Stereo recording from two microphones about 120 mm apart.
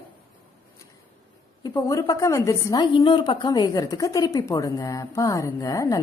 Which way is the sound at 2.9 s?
40° left (ahead or behind).